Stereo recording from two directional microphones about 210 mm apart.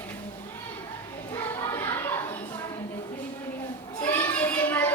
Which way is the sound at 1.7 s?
10° left (ahead or behind).